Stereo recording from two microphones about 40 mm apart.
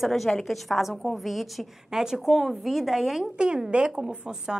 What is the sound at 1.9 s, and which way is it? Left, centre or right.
Speech, centre.